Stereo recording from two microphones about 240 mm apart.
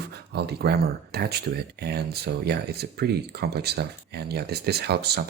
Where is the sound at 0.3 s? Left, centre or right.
Right.